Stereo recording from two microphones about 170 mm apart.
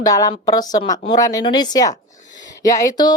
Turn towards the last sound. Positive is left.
turn(degrees=20)  # may be behind; listen again after turning